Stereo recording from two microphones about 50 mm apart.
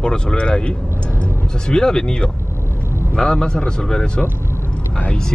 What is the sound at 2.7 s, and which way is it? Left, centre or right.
Vehicle, right.